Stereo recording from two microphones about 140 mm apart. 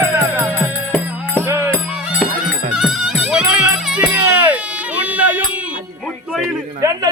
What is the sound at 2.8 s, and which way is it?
Music, 5° right (ahead or behind).